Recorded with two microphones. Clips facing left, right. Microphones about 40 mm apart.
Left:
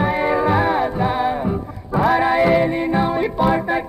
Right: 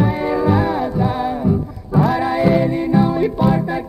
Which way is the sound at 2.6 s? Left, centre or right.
Left.